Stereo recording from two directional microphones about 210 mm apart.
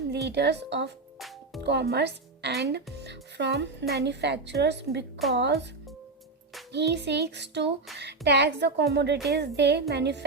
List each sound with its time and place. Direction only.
0.1 s speech: 50° right (ahead or behind)
6.7 s speech: 55° right (ahead or behind)